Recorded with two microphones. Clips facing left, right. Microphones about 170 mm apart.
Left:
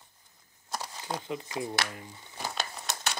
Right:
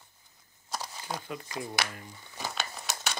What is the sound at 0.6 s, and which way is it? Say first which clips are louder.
Crumpling: left 1 dB; 20° left (ahead or behind).